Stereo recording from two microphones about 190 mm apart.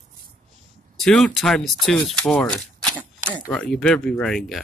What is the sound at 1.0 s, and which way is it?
Speech, 5° left (ahead or behind).